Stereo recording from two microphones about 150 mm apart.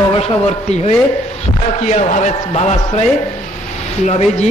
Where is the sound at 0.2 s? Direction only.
45° left (ahead or behind).